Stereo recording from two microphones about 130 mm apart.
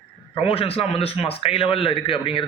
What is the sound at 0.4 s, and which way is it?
A man's voice, 45° left (ahead or behind).